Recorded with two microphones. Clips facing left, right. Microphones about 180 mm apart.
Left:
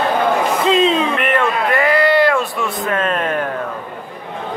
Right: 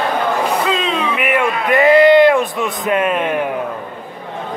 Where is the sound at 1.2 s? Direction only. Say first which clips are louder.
Even; 10° right (ahead or behind).